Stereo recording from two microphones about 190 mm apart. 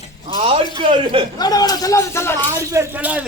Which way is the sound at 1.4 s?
20° left (ahead or behind).